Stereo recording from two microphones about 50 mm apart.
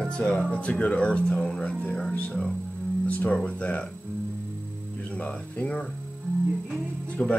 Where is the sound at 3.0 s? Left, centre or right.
Left.